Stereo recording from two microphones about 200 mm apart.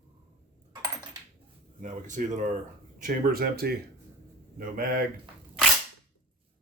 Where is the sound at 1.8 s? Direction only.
40° right (ahead or behind).